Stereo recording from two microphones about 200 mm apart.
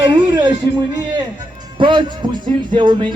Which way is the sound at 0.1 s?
25° right (ahead or behind).